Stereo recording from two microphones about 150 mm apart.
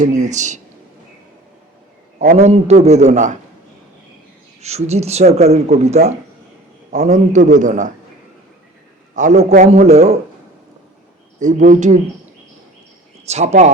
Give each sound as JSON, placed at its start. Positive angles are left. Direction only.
{"t": 0.0, "sound": "speech", "side_deg": -55}
{"t": 2.3, "sound": "speech", "side_deg": -45}
{"t": 4.6, "sound": "speech", "side_deg": -45}
{"t": 9.1, "sound": "speech", "side_deg": -55}
{"t": 11.3, "sound": "speech", "side_deg": -55}
{"t": 13.2, "sound": "speech", "side_deg": -45}